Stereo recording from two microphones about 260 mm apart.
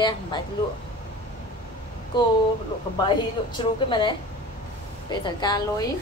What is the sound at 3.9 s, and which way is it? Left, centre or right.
A woman's voice, centre.